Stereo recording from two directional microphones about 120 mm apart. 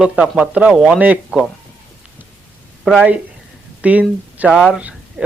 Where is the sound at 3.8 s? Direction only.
10° right (ahead or behind).